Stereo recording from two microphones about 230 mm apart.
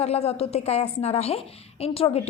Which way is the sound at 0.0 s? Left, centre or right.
Left.